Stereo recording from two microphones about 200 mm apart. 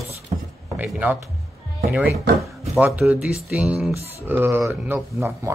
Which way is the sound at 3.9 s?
30° right (ahead or behind).